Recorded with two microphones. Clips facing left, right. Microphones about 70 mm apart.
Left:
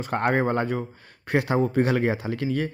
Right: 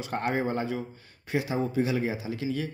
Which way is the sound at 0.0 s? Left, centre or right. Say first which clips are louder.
Left 5 dB; left.